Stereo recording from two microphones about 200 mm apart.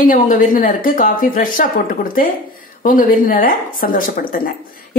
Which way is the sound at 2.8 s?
40° left (ahead or behind).